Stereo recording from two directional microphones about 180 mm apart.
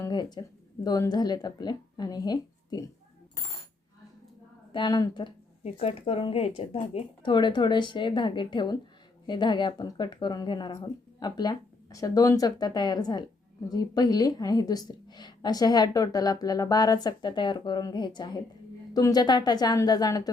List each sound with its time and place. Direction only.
0.0 s a sound: 25° left (ahead or behind)
0.9 s a woman's voice: 20° left (ahead or behind)
4.7 s a woman's voice: 25° left (ahead or behind)